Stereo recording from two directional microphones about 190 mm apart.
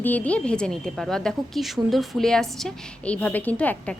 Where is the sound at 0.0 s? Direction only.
10° left (ahead or behind).